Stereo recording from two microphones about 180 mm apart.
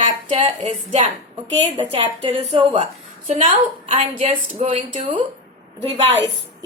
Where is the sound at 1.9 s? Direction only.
30° right (ahead or behind).